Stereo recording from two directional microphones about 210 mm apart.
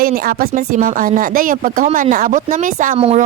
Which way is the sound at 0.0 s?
45° right (ahead or behind).